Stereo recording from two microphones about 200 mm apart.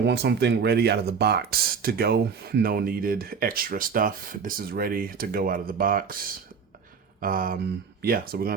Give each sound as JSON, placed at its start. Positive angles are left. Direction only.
{"t": 0.0, "sound": "speech", "side_deg": -55}